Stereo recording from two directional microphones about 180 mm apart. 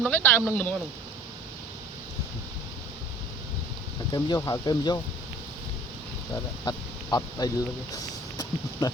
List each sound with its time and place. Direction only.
0.0 s speech: 10° left (ahead or behind)
4.1 s speech: 20° left (ahead or behind)
6.7 s speech: 20° left (ahead or behind)
7.9 s a sound: 20° left (ahead or behind)